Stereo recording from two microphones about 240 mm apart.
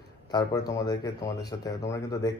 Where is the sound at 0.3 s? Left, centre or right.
Centre.